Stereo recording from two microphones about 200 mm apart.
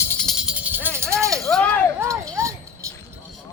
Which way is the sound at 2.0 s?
15° right (ahead or behind).